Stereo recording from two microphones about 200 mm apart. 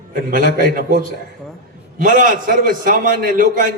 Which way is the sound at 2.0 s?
40° right (ahead or behind).